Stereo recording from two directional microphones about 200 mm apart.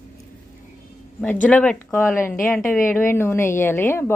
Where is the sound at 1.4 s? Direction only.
5° left (ahead or behind).